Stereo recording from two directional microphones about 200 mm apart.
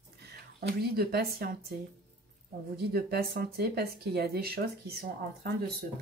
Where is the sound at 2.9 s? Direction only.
50° right (ahead or behind).